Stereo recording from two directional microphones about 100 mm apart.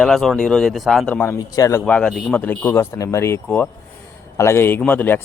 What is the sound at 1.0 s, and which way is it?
Speech, 15° left (ahead or behind).